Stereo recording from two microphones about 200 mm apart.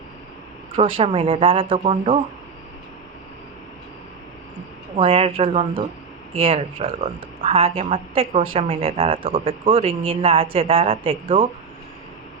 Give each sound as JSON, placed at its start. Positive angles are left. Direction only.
{"t": 0.8, "sound": "speech", "side_deg": -30}
{"t": 4.9, "sound": "speech", "side_deg": -30}